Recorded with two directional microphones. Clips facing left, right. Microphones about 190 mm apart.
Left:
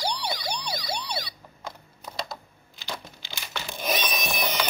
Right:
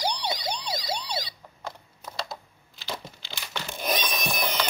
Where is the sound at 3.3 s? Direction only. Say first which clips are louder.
Even; 10° left (ahead or behind).